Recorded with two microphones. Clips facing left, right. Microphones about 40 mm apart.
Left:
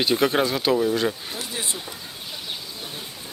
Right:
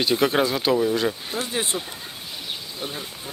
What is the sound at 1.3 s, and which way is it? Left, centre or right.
Speech, right.